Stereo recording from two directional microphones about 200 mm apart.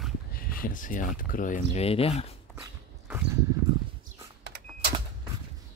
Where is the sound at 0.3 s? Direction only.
45° left (ahead or behind); by 2.2 s 30° left (ahead or behind).